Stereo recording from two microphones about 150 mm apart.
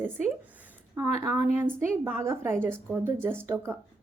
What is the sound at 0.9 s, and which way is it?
A woman's voice, 20° right (ahead or behind).